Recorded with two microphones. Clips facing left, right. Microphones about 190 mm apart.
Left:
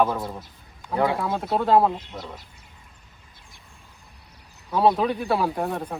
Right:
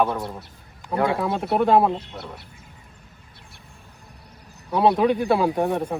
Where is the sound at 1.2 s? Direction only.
20° right (ahead or behind).